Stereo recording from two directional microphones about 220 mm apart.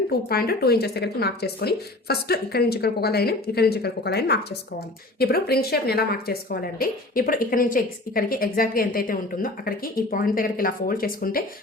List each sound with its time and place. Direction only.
0.1 s speech: 45° left (ahead or behind)